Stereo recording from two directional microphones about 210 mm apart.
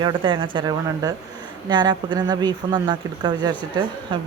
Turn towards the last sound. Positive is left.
turn(degrees=-20)  # may be behind; listen again after turning